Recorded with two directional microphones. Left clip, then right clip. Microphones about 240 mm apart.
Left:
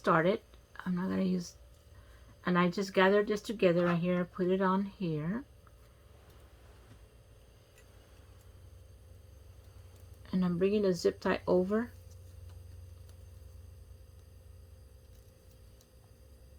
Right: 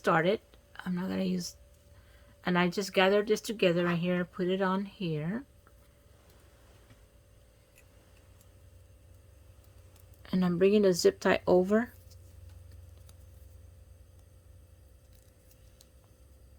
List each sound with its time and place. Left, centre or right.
0.0 s speech: right
10.2 s speech: right